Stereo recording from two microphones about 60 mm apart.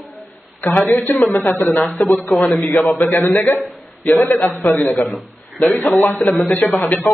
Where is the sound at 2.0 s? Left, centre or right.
Left.